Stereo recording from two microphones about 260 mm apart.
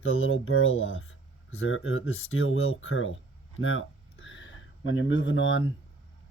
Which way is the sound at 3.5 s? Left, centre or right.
Left.